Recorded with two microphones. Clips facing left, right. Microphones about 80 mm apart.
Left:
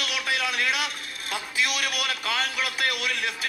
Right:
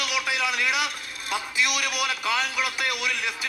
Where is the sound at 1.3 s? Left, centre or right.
Centre.